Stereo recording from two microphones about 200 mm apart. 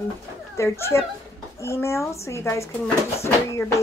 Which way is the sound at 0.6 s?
15° left (ahead or behind).